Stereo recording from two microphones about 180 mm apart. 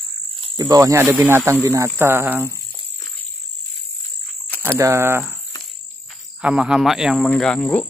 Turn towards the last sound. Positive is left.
turn(degrees=10)  # may be behind; listen again after turning